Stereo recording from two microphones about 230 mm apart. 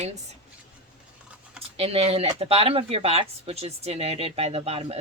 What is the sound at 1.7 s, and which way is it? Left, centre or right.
Speech, right.